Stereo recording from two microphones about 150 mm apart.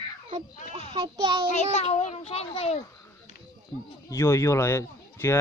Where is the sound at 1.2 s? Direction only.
35° right (ahead or behind).